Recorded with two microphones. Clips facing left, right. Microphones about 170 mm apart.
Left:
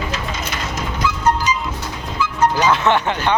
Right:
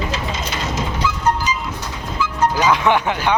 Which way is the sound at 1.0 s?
65° left (ahead or behind).